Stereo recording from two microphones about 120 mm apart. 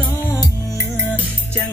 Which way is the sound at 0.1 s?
25° left (ahead or behind).